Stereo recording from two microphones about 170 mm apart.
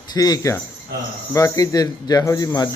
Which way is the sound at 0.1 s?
20° left (ahead or behind).